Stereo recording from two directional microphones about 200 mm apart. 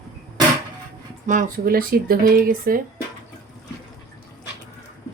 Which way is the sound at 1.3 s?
45° right (ahead or behind).